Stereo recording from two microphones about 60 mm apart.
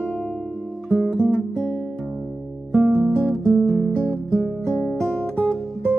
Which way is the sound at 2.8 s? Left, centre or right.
Centre.